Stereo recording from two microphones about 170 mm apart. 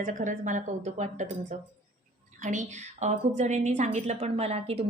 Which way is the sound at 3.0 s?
45° right (ahead or behind).